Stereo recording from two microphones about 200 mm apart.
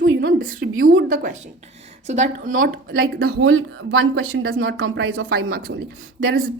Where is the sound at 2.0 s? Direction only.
35° right (ahead or behind).